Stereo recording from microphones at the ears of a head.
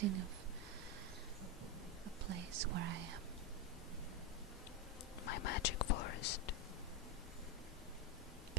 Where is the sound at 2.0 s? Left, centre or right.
Right.